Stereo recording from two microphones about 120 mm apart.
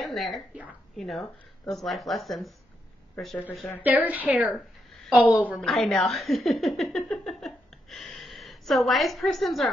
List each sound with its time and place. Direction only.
0.0 s a sound: centre (ahead or behind)
0.9 s speech: centre (ahead or behind)
3.5 s speech: 10° left (ahead or behind)
3.8 s a woman's voice: 15° right (ahead or behind)
4.6 s a sound: centre (ahead or behind)
5.6 s speech: centre (ahead or behind)